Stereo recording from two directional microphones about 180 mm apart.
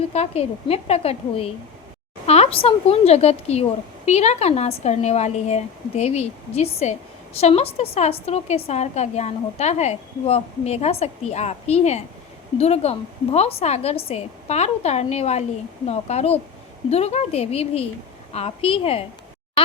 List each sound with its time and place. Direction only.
0.1 s a woman's voice: 35° left (ahead or behind)